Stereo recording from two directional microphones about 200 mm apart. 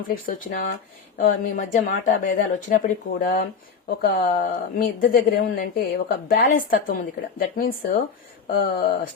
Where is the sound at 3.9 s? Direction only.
50° left (ahead or behind).